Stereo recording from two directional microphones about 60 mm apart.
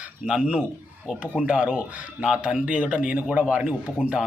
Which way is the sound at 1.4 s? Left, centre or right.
Centre.